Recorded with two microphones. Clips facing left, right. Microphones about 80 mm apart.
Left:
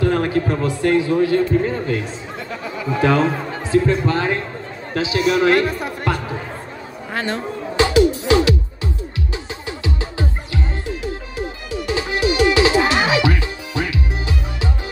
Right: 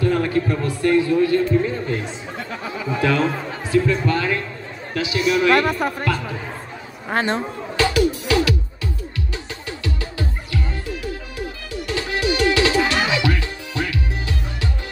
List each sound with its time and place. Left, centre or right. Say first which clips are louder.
0.0 s a man's voice: left 1 dB; left
1.1 s a man's voice: left 1 dB; left
3.0 s speech: left 3 dB; left
4.1 s a man's voice: left 1 dB; left
5.5 s speech: even; right
7.1 s speech: right 3 dB; right
7.7 s music: left 4 dB; left
9.7 s music: left 2 dB; left